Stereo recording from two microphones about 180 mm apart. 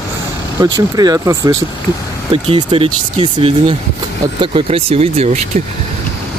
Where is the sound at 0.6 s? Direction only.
25° right (ahead or behind).